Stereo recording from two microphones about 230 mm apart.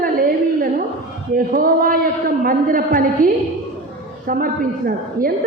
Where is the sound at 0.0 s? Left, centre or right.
Right.